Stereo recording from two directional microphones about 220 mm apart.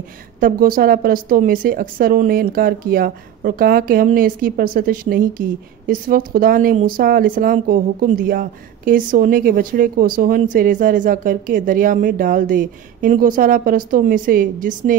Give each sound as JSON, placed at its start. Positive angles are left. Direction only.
{"t": 0.4, "sound": "a woman's voice", "side_deg": -40}